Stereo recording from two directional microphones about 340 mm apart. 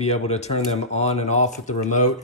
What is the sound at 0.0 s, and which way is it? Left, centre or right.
Speech, centre.